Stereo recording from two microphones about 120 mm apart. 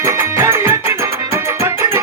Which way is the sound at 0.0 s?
25° right (ahead or behind).